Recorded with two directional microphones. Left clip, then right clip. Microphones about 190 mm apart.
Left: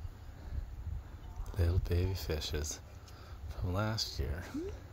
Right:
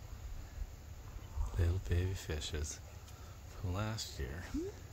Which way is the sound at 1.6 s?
35° left (ahead or behind).